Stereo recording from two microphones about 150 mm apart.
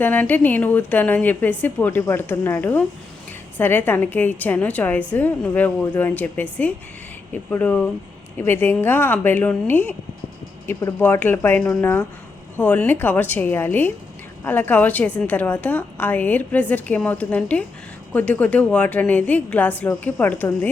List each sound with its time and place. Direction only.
0.0 s a woman's voice: 10° left (ahead or behind)